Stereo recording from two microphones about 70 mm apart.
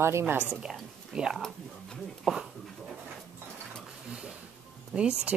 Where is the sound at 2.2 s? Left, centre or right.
Centre.